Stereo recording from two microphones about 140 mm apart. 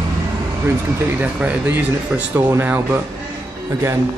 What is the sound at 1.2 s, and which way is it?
Speech, 10° right (ahead or behind).